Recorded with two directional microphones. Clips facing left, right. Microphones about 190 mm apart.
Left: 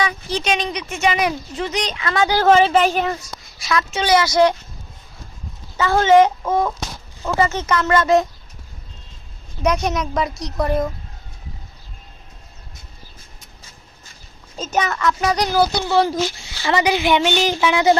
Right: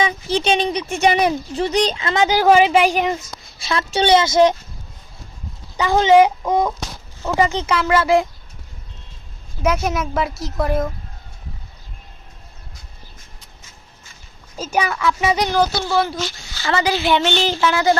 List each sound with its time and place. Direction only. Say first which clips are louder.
0.0 s speech: right 3 dB; 25° right (ahead or behind)
5.7 s speech: even; 15° right (ahead or behind)
9.6 s a woman's voice: even; 5° right (ahead or behind)
14.5 s speech: even; 10° right (ahead or behind); by 15.8 s 10° left (ahead or behind)
16.6 s a woman's voice: left 1 dB; 20° left (ahead or behind)